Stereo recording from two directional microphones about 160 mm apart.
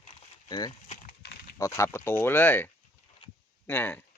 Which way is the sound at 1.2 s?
90° left.